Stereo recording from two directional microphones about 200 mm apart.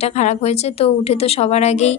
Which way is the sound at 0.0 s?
35° left (ahead or behind).